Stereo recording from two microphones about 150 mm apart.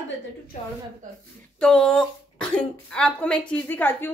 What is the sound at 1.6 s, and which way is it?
Speech, 5° left (ahead or behind).